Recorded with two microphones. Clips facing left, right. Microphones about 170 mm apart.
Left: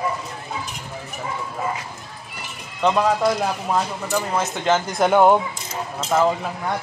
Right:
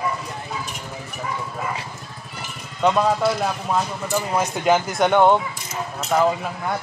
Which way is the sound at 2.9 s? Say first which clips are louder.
Left 1 dB; 10° left (ahead or behind).